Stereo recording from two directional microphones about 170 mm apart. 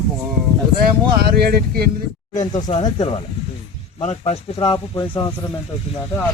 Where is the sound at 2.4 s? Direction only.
25° left (ahead or behind).